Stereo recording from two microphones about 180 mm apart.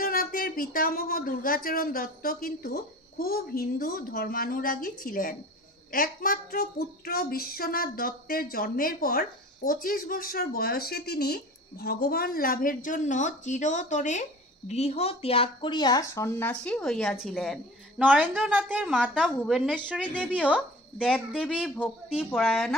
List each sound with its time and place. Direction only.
0.0 s speech: 55° left (ahead or behind); by 17.6 s centre (ahead or behind)
18.0 s a woman's voice: 10° right (ahead or behind)